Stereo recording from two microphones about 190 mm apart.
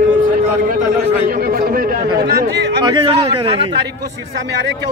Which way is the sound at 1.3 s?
50° right (ahead or behind).